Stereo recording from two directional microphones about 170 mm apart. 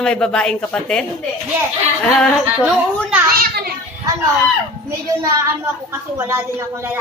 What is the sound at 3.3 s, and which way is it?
Speech, 65° right (ahead or behind).